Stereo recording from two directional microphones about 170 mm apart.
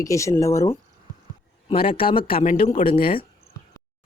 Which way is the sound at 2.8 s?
50° left (ahead or behind).